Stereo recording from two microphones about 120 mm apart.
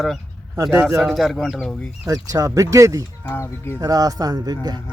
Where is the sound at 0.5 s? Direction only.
25° right (ahead or behind).